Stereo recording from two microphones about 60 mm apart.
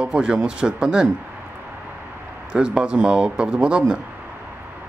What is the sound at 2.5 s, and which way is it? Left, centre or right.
Speech, centre.